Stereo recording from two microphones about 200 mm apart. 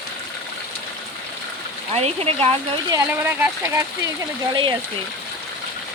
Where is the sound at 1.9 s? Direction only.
30° right (ahead or behind).